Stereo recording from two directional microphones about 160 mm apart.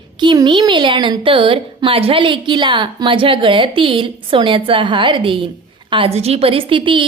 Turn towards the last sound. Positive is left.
turn(degrees=-30)  # may be behind; listen again after turning